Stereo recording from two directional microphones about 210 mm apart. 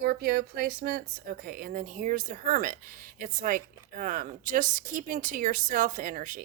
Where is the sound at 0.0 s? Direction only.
45° right (ahead or behind).